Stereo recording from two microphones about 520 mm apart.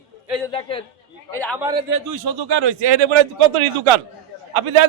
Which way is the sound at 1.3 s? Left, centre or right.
Centre.